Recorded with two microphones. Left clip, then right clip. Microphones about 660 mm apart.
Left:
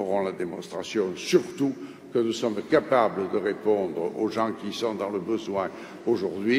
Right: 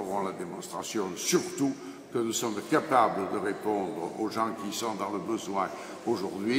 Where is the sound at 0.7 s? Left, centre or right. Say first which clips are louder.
Left 5 dB; right.